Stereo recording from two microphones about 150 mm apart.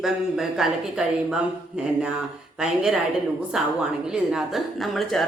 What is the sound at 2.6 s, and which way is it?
Speech, 5° right (ahead or behind).